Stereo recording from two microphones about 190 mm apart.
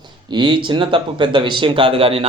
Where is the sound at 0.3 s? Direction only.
25° right (ahead or behind).